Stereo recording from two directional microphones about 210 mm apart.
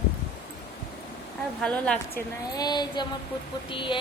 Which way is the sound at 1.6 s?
5° left (ahead or behind).